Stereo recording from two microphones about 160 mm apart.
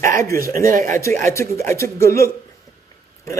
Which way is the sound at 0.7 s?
60° right (ahead or behind).